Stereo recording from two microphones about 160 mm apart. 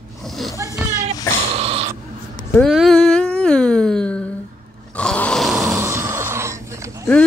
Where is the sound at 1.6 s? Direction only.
40° right (ahead or behind).